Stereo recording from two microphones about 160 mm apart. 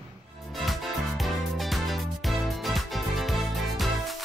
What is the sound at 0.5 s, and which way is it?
Music, centre (ahead or behind).